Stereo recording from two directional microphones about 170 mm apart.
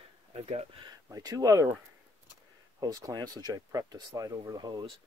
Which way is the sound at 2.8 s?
20° right (ahead or behind).